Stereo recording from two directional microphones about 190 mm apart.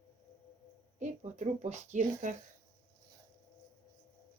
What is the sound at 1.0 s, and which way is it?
Speech, 40° right (ahead or behind).